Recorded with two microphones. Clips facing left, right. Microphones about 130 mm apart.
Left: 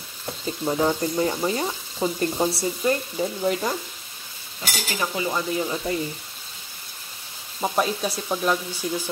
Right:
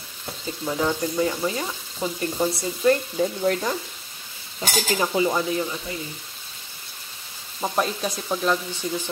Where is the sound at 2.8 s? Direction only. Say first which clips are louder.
Right 5 dB; 5° left (ahead or behind).